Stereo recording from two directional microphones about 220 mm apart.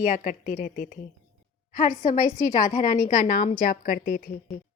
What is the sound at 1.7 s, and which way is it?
A woman's voice, 40° left (ahead or behind).